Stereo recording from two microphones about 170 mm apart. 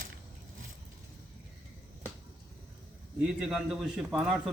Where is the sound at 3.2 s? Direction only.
Centre (ahead or behind).